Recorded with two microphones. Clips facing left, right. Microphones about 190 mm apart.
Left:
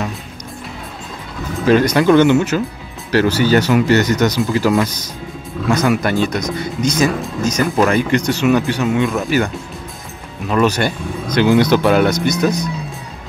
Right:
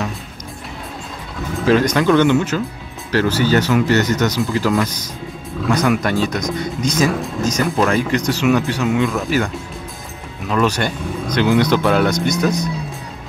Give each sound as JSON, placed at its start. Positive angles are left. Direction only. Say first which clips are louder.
{"t": 1.5, "sound": "speech", "louder": "left 2 dB", "side_deg": 0}
{"t": 2.0, "sound": "speech", "louder": "left 4 dB", "side_deg": 15}
{"t": 5.6, "sound": "speech", "louder": "left 1 dB", "side_deg": 0}
{"t": 10.5, "sound": "speech", "louder": "left 2 dB", "side_deg": 5}